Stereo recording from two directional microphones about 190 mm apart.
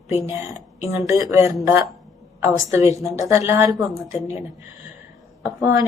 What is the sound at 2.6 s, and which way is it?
A woman's voice, 15° right (ahead or behind).